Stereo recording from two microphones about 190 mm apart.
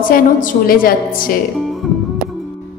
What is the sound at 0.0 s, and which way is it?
A woman's voice, 45° left (ahead or behind).